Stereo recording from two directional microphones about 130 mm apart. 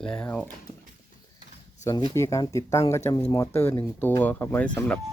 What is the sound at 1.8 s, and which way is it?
Speech, 30° left (ahead or behind).